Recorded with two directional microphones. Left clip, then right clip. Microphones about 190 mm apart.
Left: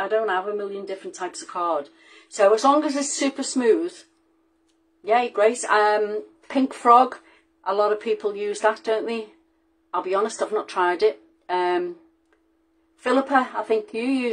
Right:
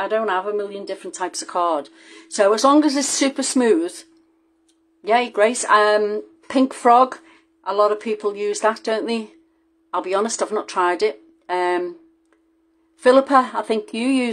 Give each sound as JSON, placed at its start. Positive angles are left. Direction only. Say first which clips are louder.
{"t": 0.0, "sound": "speech", "louder": "right 2 dB", "side_deg": -40}
{"t": 5.0, "sound": "speech", "louder": "right 2 dB", "side_deg": -40}
{"t": 13.0, "sound": "speech", "louder": "right 6 dB", "side_deg": -40}